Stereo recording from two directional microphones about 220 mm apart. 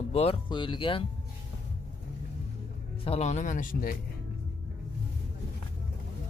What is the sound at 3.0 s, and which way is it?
Speech, 30° left (ahead or behind).